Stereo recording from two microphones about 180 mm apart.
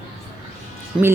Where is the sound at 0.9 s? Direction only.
5° right (ahead or behind).